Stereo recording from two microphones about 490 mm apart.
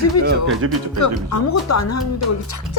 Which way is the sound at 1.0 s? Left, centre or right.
Left.